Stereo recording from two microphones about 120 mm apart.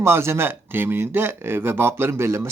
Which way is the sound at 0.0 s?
20° right (ahead or behind).